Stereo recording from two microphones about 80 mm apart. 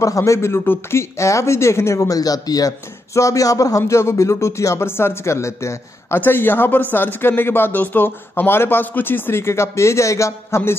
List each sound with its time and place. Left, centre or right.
0.0 s speech: left